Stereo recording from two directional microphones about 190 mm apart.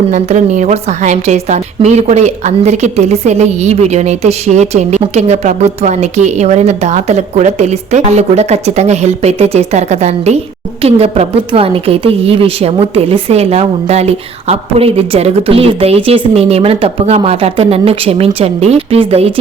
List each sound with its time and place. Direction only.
0.1 s a woman's voice: 40° right (ahead or behind)